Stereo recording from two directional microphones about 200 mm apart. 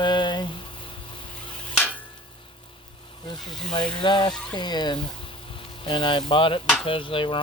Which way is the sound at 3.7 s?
25° left (ahead or behind).